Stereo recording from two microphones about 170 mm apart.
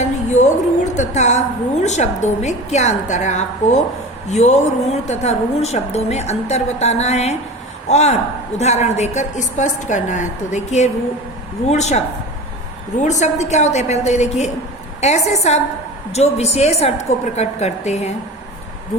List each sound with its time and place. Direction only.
0.0 s a sound: 45° left (ahead or behind)
0.9 s a woman's voice: 45° left (ahead or behind)
13.1 s a woman's voice: 45° left (ahead or behind)